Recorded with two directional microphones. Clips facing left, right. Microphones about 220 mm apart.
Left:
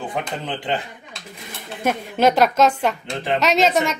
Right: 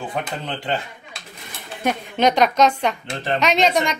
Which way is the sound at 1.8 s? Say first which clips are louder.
Left 1 dB; 5° left (ahead or behind).